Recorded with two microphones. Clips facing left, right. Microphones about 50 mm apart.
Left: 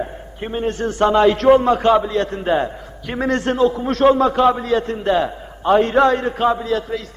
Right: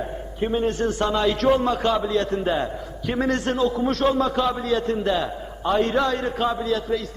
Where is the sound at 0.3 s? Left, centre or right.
Left.